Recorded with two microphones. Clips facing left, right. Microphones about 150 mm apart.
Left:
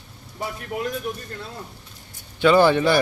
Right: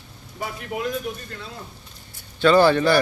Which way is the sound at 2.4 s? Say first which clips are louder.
Even; 15° left (ahead or behind).